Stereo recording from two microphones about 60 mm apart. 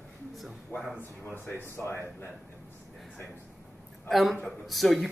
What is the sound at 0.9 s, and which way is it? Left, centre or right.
Speech, left.